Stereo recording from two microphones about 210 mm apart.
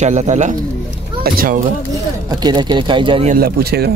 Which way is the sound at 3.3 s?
50° right (ahead or behind).